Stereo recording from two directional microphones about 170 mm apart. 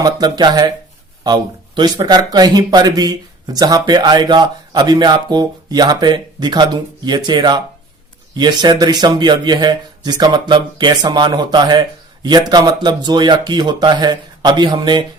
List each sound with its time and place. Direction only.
0.0 s speech: 25° right (ahead or behind)